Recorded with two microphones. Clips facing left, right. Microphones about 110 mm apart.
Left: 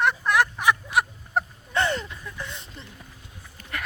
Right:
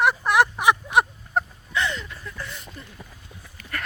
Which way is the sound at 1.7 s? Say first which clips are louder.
Left 2 dB; 50° left (ahead or behind).